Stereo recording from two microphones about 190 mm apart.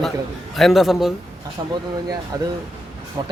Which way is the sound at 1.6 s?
20° right (ahead or behind).